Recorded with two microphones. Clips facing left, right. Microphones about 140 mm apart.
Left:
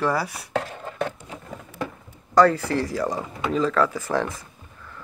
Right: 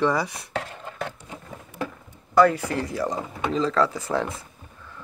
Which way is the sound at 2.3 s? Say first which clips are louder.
Left 1 dB; 10° right (ahead or behind).